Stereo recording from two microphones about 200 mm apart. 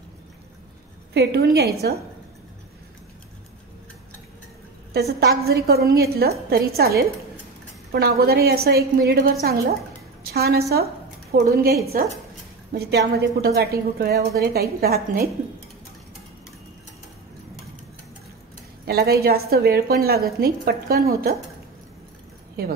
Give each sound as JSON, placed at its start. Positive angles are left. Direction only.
{"t": 1.1, "sound": "a woman's voice", "side_deg": -55}
{"t": 4.9, "sound": "a woman's voice", "side_deg": -50}
{"t": 12.7, "sound": "a woman's voice", "side_deg": -55}
{"t": 18.9, "sound": "a woman's voice", "side_deg": -50}